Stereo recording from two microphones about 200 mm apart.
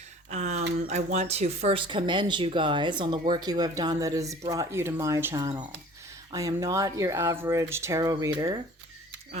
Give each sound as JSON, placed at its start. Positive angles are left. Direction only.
{"t": 0.3, "sound": "speech", "side_deg": -35}